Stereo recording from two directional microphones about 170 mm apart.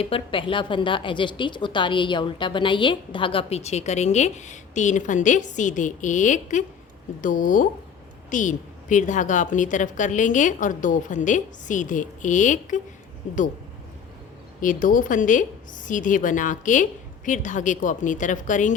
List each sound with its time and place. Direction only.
0.0 s a woman's voice: 30° left (ahead or behind)
14.6 s a woman's voice: 50° left (ahead or behind)